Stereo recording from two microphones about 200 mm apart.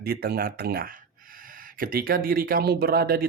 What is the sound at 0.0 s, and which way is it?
Speech, 50° right (ahead or behind).